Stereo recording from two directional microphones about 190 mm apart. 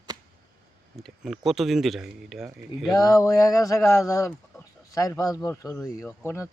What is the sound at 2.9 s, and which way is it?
Speech, 20° left (ahead or behind).